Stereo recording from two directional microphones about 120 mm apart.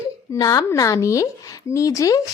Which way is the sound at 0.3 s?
25° left (ahead or behind).